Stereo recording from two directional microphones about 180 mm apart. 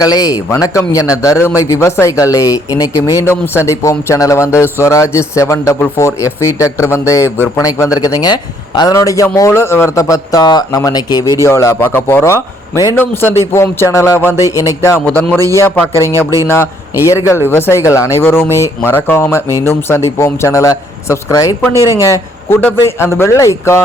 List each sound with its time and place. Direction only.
0.0 s a man's voice: 20° left (ahead or behind)
16.1 s a man's voice: 20° right (ahead or behind)
16.5 s a man's voice: 15° left (ahead or behind)